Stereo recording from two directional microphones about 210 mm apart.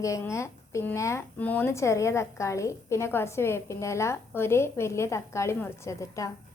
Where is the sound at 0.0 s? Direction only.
15° left (ahead or behind).